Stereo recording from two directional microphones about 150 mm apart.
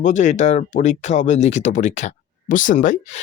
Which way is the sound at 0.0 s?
55° left (ahead or behind).